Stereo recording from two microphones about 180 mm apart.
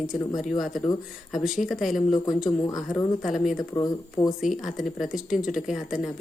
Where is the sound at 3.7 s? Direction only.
20° left (ahead or behind).